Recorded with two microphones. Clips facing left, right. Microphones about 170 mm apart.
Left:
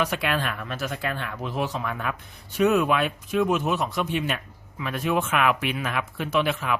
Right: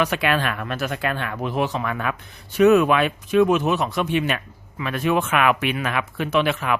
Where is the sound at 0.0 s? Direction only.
70° right (ahead or behind).